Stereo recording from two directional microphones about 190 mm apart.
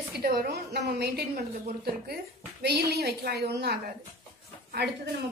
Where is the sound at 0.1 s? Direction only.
55° right (ahead or behind).